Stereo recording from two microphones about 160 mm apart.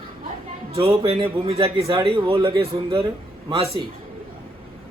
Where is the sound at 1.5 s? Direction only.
35° right (ahead or behind).